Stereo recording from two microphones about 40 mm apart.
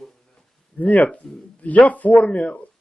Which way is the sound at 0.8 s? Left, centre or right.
Left.